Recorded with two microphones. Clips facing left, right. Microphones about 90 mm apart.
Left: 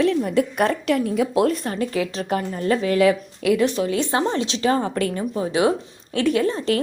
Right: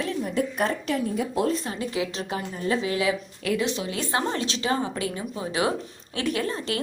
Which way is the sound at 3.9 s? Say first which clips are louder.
Left 5 dB; 30° left (ahead or behind).